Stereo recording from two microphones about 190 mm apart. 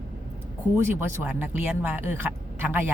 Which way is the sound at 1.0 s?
10° right (ahead or behind).